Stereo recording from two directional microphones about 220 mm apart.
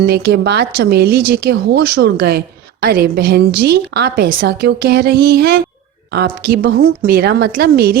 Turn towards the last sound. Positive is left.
turn(degrees=-45)  # may be behind; listen again after turning